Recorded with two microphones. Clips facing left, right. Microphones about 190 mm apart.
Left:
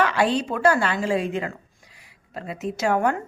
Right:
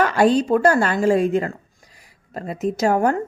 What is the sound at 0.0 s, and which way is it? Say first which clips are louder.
A woman's voice: right 5 dB; 45° right (ahead or behind).